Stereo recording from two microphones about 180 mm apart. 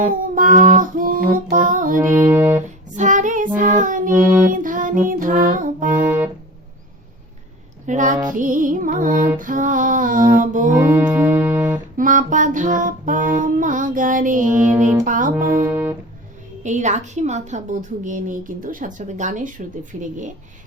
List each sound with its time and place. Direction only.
0.3 s child singing: 45° right (ahead or behind)
0.7 s music: 50° right (ahead or behind)
2.1 s music: 15° right (ahead or behind)
2.9 s child singing: 45° right (ahead or behind)
4.4 s a woman's voice: 50° right (ahead or behind)
6.0 s music: 10° right (ahead or behind)
7.9 s a woman's voice: 45° right (ahead or behind)
10.8 s music: 10° right (ahead or behind)
11.9 s a woman's voice: 45° right (ahead or behind)